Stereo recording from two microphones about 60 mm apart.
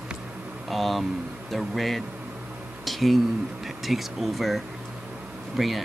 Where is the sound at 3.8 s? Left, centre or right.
Centre.